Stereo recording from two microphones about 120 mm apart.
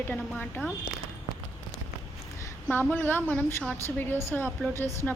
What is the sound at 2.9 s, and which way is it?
A woman's voice, 15° left (ahead or behind).